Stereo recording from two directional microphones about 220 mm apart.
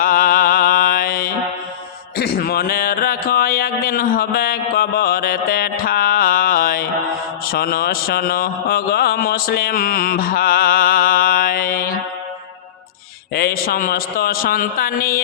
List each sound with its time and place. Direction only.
0.0 s mantra: 40° left (ahead or behind)
2.1 s a sound: 45° left (ahead or behind)
7.4 s mantra: 45° left (ahead or behind)
13.3 s a man's voice: 45° left (ahead or behind)